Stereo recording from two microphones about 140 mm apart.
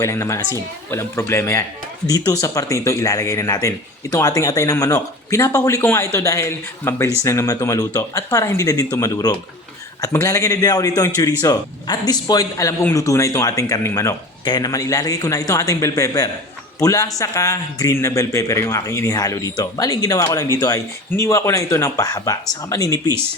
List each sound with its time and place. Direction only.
0.0 s a man's voice: 20° left (ahead or behind)